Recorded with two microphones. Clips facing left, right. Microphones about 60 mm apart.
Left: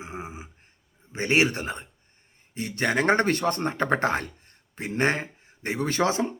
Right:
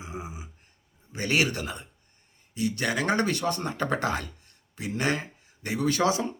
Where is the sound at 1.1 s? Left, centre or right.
Left.